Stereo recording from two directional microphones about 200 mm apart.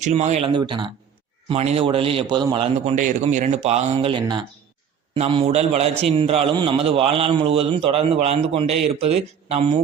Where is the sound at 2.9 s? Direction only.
40° right (ahead or behind).